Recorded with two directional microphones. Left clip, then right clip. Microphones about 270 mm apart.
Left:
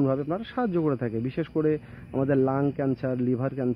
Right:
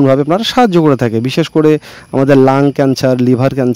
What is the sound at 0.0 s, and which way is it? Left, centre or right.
Speech, right.